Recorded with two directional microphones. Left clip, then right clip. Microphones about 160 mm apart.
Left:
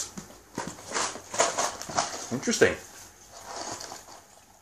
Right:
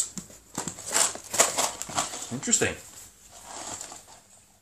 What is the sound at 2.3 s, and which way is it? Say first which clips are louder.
Speech: right 1 dB; 10° right (ahead or behind).